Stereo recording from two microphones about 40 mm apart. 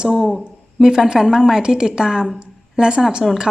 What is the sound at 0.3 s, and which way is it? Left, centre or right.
A woman's voice, centre.